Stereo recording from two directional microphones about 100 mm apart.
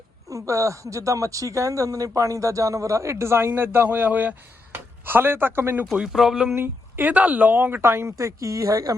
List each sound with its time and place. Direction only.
0.3 s speech: 35° right (ahead or behind)
5.9 s speech: 5° right (ahead or behind)
6.5 s a woman's voice: 20° right (ahead or behind)